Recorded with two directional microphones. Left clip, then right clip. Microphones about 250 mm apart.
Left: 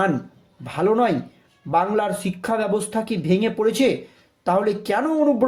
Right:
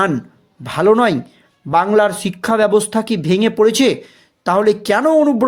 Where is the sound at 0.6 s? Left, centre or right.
Right.